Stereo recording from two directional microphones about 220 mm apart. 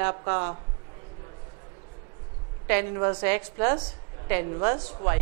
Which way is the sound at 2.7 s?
20° right (ahead or behind).